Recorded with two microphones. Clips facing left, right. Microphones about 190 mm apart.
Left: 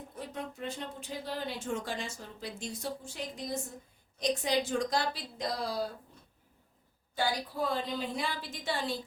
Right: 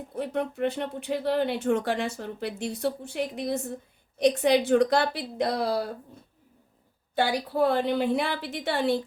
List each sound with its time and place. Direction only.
0.2 s speech: 65° right (ahead or behind)
7.2 s speech: 65° right (ahead or behind)